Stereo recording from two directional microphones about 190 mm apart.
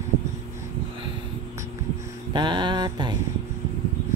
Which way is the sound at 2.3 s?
25° right (ahead or behind).